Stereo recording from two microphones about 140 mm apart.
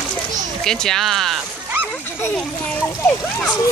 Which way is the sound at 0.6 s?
5° left (ahead or behind).